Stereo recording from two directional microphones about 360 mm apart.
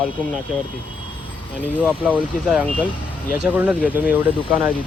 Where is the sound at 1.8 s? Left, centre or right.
Centre.